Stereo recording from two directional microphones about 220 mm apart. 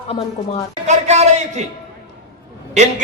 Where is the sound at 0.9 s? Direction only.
30° right (ahead or behind).